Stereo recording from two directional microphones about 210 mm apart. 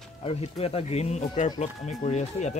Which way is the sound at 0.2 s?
30° left (ahead or behind).